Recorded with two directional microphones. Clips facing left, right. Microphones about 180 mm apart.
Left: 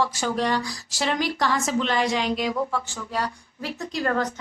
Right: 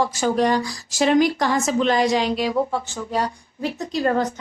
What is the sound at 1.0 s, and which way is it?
Speech, 15° right (ahead or behind).